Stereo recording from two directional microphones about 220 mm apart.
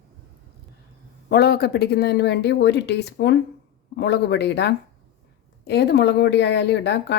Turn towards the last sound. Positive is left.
turn(degrees=50)  # may be behind; listen again after turning